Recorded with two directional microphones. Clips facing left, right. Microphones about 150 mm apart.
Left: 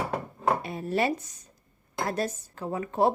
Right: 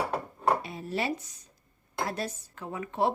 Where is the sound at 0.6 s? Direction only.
55° left (ahead or behind).